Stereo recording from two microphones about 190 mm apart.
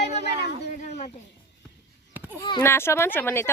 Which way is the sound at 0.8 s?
40° left (ahead or behind).